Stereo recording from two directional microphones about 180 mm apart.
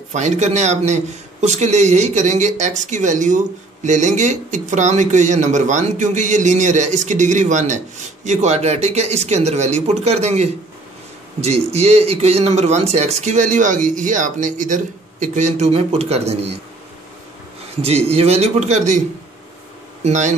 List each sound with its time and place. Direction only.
0.1 s a man's voice: 40° right (ahead or behind)
17.8 s a man's voice: 35° right (ahead or behind)
20.1 s a man's voice: 40° right (ahead or behind)